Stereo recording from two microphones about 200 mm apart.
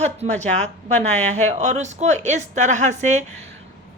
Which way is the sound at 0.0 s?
35° right (ahead or behind).